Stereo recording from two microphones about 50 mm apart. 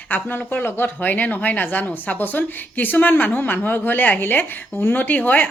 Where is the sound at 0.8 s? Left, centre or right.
Left.